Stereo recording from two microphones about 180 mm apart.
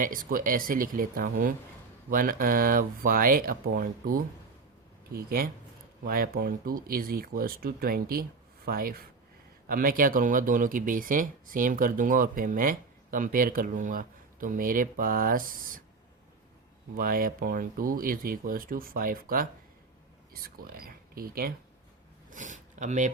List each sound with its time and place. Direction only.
0.0 s speech: 50° right (ahead or behind)
5.1 s speech: 55° right (ahead or behind)
17.0 s speech: 50° right (ahead or behind)
22.3 s speech: 45° right (ahead or behind)